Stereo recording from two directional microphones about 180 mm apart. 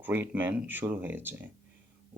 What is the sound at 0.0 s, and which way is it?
Speech, 10° right (ahead or behind).